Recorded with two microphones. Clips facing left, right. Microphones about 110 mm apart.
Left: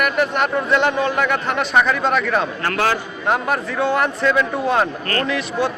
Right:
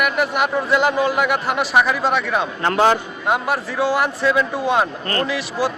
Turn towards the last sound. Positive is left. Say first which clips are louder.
# left 1 dB
turn(degrees=-5)  # may be behind; listen again after turning